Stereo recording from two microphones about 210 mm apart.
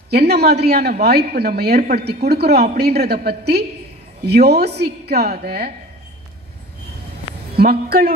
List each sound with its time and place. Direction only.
0.1 s a woman's voice: 50° right (ahead or behind)
7.5 s a woman's voice: 50° right (ahead or behind)